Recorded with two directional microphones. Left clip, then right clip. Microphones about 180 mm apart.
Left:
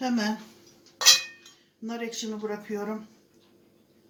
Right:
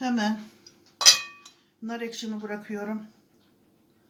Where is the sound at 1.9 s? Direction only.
10° right (ahead or behind).